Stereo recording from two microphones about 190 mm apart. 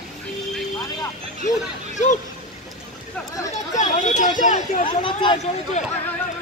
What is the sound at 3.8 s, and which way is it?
Speech, 40° left (ahead or behind).